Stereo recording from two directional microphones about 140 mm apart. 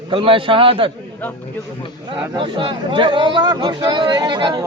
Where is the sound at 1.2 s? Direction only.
10° left (ahead or behind).